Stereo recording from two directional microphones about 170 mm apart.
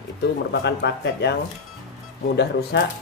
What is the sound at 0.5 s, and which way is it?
Speech, 80° left.